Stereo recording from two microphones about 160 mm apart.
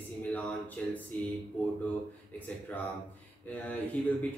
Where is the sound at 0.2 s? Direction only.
10° left (ahead or behind).